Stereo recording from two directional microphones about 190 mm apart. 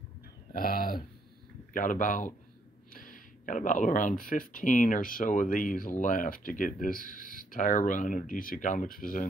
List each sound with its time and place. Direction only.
0.5 s speech: 50° left (ahead or behind)